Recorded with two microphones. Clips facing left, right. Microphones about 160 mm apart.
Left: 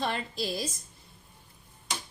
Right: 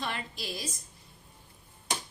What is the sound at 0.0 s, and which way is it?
Speech, 30° left (ahead or behind).